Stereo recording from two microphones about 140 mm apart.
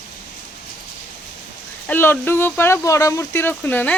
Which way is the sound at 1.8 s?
15° left (ahead or behind).